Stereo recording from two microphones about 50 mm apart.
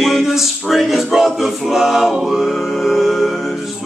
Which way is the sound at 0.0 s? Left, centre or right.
Centre.